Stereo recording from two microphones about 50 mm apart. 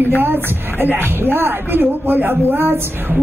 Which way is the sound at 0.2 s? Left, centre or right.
Right.